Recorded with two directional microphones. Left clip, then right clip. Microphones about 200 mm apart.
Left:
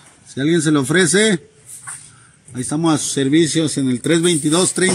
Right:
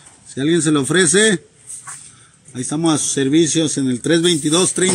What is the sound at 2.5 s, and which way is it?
Speech, 25° left (ahead or behind).